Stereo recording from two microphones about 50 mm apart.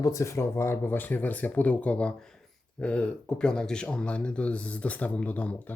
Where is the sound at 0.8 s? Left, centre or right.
Left.